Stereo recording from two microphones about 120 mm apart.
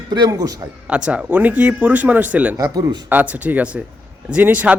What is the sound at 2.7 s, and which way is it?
Speech, 30° right (ahead or behind).